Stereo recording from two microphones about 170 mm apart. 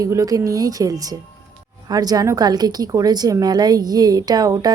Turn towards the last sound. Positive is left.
turn(degrees=-20)  # may be behind; listen again after turning